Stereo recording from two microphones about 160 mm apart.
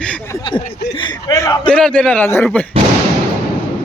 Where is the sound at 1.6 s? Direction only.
5° left (ahead or behind).